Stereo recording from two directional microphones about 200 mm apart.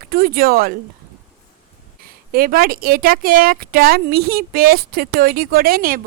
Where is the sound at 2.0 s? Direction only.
45° right (ahead or behind).